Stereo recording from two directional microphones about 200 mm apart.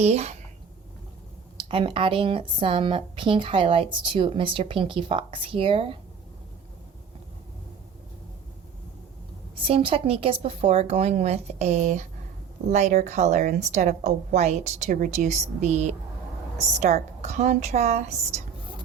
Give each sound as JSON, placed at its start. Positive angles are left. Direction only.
{"t": 0.0, "sound": "speech", "side_deg": -35}
{"t": 1.5, "sound": "speech", "side_deg": -25}
{"t": 9.6, "sound": "speech", "side_deg": -30}